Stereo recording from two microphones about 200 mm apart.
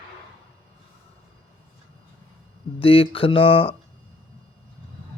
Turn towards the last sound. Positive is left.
turn(degrees=25)  # may be behind; listen again after turning